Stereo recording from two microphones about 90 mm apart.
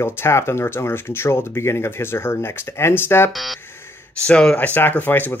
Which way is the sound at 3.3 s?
Centre (ahead or behind).